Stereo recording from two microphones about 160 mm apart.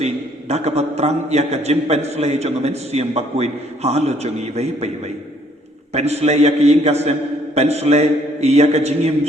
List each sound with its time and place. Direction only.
0.0 s a man's voice: 40° right (ahead or behind)
5.9 s a man's voice: 40° right (ahead or behind)